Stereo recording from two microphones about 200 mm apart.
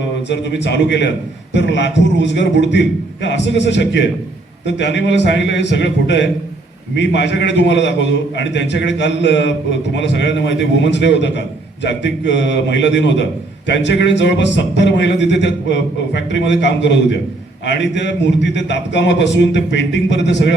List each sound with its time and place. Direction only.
0.3 s a man's voice: 60° left (ahead or behind)